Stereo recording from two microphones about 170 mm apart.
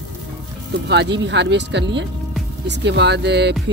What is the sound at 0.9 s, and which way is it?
Speech, 90° right.